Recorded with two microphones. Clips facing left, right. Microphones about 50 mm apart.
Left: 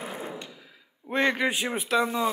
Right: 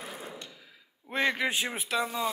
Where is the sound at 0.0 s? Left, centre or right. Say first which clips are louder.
Left 6 dB; left.